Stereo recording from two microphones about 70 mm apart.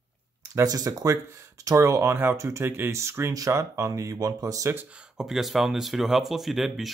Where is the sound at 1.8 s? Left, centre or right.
Right.